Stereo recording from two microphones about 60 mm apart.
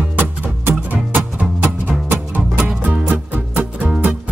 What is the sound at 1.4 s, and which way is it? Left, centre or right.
Music, right.